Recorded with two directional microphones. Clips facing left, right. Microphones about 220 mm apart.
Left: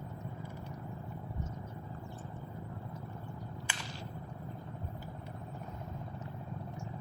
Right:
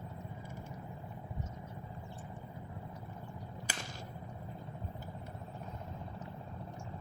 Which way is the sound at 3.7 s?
40° right (ahead or behind).